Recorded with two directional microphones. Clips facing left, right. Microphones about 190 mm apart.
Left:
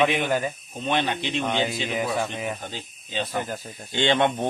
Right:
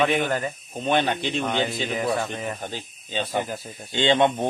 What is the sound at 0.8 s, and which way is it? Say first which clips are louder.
Speech: right 3 dB; 45° right (ahead or behind).